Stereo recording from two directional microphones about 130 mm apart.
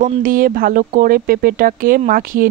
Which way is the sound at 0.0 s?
90° right.